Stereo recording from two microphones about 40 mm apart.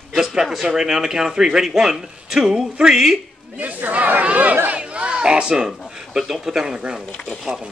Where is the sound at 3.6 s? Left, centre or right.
Right.